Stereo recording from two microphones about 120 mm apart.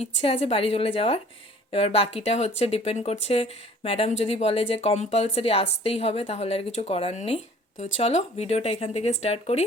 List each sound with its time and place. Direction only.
0.0 s a woman's voice: 55° left (ahead or behind)
7.8 s speech: 75° left (ahead or behind)